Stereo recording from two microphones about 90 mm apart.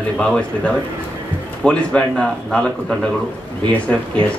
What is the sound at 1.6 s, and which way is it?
A man's voice, 15° left (ahead or behind).